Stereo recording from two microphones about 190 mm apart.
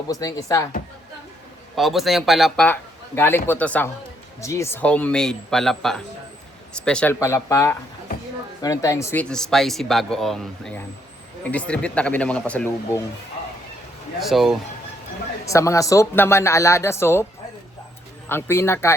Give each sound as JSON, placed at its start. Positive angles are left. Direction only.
{"t": 0.1, "sound": "speech", "side_deg": 20}
{"t": 1.7, "sound": "speech", "side_deg": 0}
{"t": 14.2, "sound": "speech", "side_deg": 0}
{"t": 15.4, "sound": "speech", "side_deg": 15}
{"t": 18.3, "sound": "speech", "side_deg": 10}